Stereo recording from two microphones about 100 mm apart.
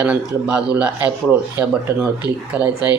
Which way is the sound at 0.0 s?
10° right (ahead or behind).